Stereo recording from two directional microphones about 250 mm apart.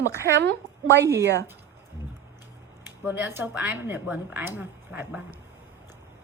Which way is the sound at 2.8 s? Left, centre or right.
Centre.